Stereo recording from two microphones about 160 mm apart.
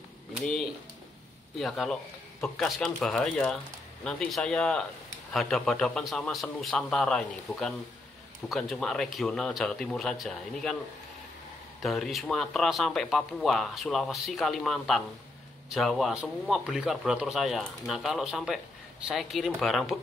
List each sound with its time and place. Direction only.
1.6 s speech: centre (ahead or behind)
11.8 s speech: centre (ahead or behind)